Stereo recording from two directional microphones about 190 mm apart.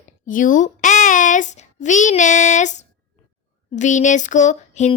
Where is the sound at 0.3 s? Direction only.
45° left (ahead or behind).